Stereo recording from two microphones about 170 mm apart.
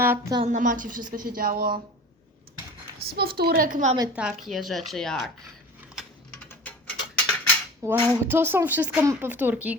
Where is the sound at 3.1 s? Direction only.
65° right (ahead or behind); by 3.9 s 50° right (ahead or behind).